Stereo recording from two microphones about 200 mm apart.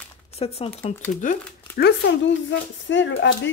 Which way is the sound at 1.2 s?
40° left (ahead or behind).